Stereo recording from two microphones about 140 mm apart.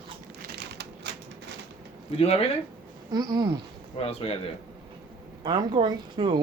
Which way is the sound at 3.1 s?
30° right (ahead or behind).